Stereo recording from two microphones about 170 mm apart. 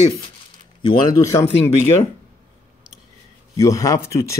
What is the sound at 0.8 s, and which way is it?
Speech, 25° left (ahead or behind).